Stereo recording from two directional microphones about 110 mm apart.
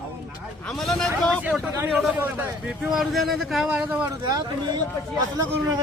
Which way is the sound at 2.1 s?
15° right (ahead or behind).